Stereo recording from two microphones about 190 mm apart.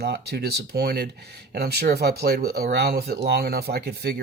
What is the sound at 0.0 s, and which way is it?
Speech, 60° right (ahead or behind).